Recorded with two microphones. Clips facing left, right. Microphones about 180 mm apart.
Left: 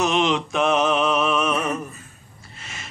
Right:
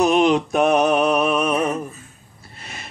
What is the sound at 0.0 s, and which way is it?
Mantra, 40° right (ahead or behind).